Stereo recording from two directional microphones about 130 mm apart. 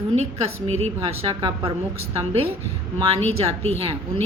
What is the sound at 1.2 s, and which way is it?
Speech, 40° right (ahead or behind).